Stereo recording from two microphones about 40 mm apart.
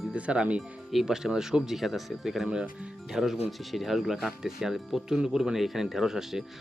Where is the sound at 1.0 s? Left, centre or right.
Centre.